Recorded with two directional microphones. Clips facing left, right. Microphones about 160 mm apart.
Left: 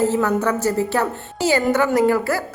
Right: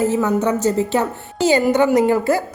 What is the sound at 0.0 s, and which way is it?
A woman's voice, 15° right (ahead or behind).